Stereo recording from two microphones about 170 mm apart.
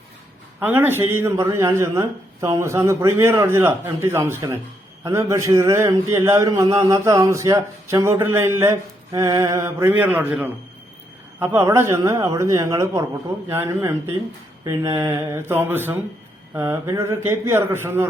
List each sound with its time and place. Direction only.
0.6 s a man's voice: 10° right (ahead or behind)